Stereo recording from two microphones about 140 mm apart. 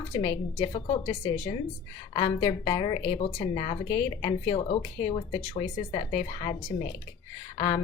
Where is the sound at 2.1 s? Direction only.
30° left (ahead or behind).